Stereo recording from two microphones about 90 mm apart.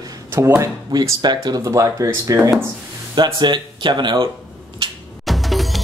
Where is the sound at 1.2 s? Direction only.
50° right (ahead or behind).